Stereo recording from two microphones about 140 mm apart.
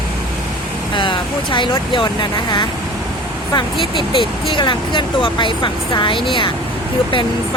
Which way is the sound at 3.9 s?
35° left (ahead or behind).